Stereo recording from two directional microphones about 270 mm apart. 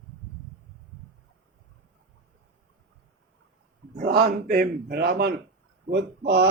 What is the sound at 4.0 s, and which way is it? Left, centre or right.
Speech, right.